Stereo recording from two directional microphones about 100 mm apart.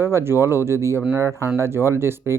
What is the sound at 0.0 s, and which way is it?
Speech, 25° right (ahead or behind).